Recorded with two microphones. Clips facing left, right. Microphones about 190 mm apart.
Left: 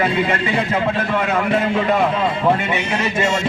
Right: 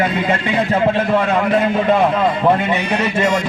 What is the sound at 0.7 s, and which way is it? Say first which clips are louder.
Speech: right 4 dB; 35° right (ahead or behind).